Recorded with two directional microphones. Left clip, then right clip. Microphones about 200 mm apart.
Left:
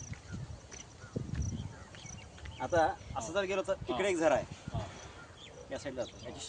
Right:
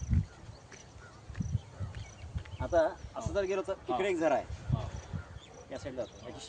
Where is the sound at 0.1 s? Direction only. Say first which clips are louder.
Right 10 dB; 5° left (ahead or behind).